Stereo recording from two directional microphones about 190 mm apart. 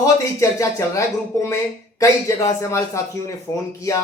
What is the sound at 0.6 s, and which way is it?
Speech, 15° left (ahead or behind).